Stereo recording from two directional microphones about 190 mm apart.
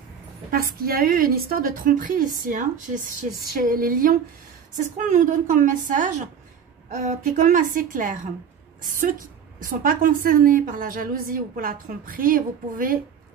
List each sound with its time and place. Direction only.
0.5 s a woman's voice: 50° right (ahead or behind)
9.6 s a woman's voice: 45° right (ahead or behind)